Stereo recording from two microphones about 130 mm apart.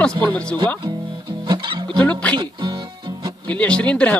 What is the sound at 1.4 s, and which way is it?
Music, 35° right (ahead or behind).